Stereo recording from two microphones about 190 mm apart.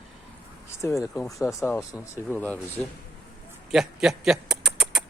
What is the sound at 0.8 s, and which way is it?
Speech, 15° left (ahead or behind).